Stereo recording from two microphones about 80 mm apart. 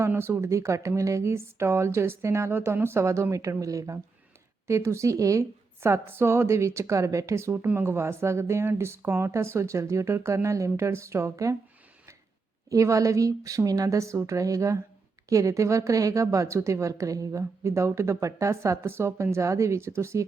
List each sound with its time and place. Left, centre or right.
0.0 s a woman's voice: right
7.5 s a woman's voice: right
12.7 s a woman's voice: right